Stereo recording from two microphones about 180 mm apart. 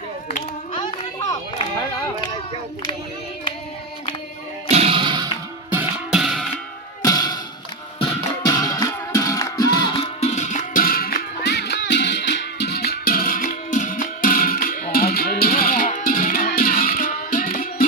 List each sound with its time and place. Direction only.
0.7 s a sound: 25° left (ahead or behind)
4.7 s music: 35° right (ahead or behind)
6.1 s music: centre (ahead or behind)
7.0 s music: 20° left (ahead or behind)
8.4 s music: 20° left (ahead or behind); by 14.9 s 45° left (ahead or behind)
14.9 s music: 55° left (ahead or behind)